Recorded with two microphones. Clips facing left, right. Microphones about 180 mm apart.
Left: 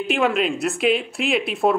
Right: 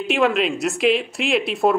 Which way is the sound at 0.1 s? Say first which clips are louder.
Right 2 dB; centre (ahead or behind).